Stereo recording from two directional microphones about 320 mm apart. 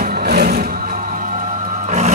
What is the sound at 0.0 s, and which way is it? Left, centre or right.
Music, right.